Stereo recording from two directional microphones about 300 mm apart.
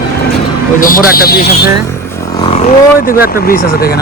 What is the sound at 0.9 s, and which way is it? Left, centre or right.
Speech, left.